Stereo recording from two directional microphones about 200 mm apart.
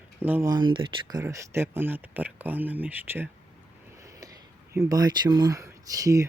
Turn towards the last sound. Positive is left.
turn(degrees=-15)  # may be behind; listen again after turning